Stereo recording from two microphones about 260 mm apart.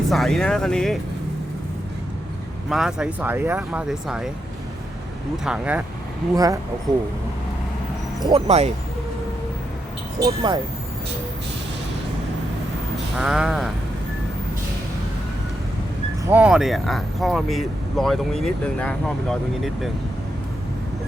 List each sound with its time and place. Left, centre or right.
0.1 s speech: centre
2.6 s speech: centre
5.5 s speech: centre
8.2 s speech: centre
10.2 s speech: centre
13.1 s speech: centre
16.3 s speech: centre